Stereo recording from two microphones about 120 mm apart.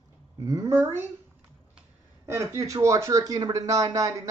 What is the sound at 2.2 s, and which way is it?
Speech, 25° right (ahead or behind).